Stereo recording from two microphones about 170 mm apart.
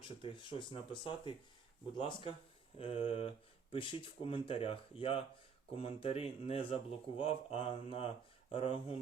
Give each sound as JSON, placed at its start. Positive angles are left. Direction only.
{"t": 0.0, "sound": "speech", "side_deg": 30}